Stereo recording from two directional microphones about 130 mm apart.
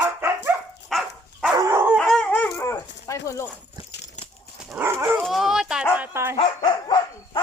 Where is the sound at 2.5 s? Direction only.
25° left (ahead or behind).